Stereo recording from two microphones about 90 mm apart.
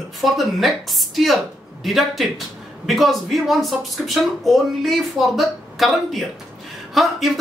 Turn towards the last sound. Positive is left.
turn(degrees=0)  # may be behind; listen again after turning